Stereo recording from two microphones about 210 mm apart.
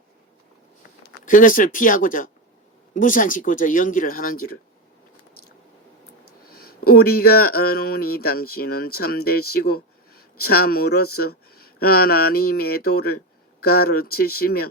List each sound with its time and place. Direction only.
1.0 s speech: 40° left (ahead or behind)
6.5 s speech: 45° left (ahead or behind)